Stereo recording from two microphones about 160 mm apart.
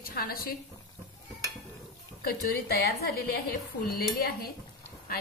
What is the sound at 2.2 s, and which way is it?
Speech, 75° left (ahead or behind).